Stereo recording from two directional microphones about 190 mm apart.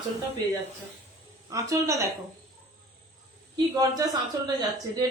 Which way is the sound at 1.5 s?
15° right (ahead or behind).